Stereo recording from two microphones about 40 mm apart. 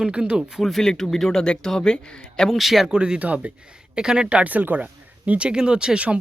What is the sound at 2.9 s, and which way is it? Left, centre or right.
Speech, right.